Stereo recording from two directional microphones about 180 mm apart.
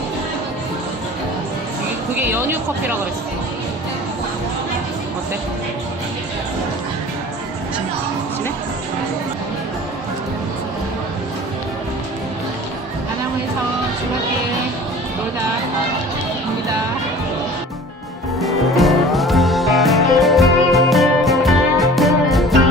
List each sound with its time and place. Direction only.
2.1 s speech: 10° right (ahead or behind)
18.3 s music: centre (ahead or behind)